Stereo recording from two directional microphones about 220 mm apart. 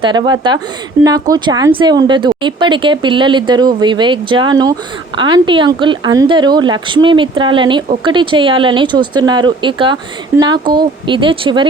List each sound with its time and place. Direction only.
0.0 s speech: 20° right (ahead or behind)